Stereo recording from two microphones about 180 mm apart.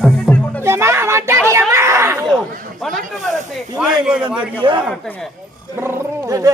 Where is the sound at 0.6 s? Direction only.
15° right (ahead or behind).